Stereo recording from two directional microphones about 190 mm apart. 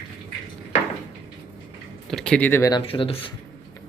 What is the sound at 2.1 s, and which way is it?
Speech, 5° left (ahead or behind).